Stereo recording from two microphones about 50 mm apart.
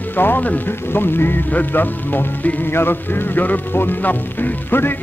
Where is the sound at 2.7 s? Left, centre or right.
Left.